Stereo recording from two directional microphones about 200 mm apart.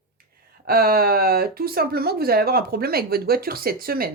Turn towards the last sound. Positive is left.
turn(degrees=-50)  # may be behind; listen again after turning